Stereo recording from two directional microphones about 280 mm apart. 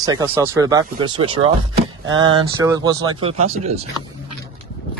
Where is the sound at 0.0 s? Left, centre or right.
Centre.